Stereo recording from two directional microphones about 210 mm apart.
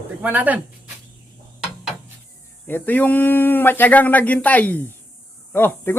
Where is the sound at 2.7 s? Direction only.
10° left (ahead or behind).